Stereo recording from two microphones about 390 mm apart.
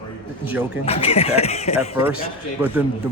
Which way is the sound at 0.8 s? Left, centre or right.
Centre.